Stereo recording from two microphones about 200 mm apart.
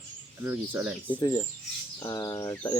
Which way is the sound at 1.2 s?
20° left (ahead or behind).